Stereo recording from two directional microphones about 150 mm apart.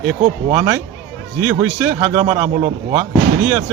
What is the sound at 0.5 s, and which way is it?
Speech, 15° right (ahead or behind).